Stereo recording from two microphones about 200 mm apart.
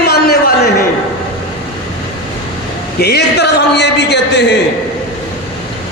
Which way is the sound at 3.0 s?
55° left (ahead or behind).